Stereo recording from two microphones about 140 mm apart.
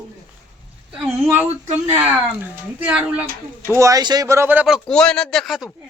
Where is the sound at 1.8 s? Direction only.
15° right (ahead or behind).